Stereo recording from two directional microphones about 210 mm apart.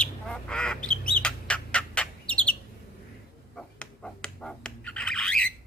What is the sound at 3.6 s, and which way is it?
Squawk, 5° left (ahead or behind).